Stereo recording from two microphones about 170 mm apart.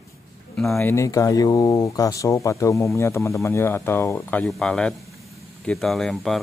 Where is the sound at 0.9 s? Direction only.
20° left (ahead or behind).